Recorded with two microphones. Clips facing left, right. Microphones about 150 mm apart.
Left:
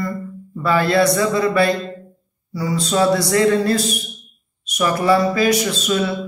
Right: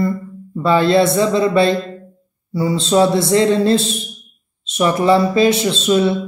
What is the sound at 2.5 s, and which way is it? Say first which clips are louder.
Speech: right 4 dB; 25° right (ahead or behind).